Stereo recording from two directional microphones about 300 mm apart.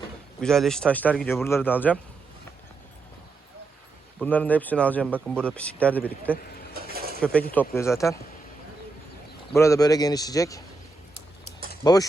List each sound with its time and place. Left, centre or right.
0.4 s speech: centre
4.2 s speech: centre
6.7 s pulleys: right
7.5 s speech: centre
9.5 s speech: centre
11.8 s speech: centre